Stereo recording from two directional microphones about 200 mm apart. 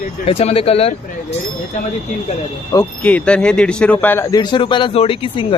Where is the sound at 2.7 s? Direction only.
10° left (ahead or behind); by 5.4 s 25° left (ahead or behind).